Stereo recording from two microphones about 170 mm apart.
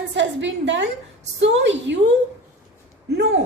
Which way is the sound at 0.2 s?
90° right.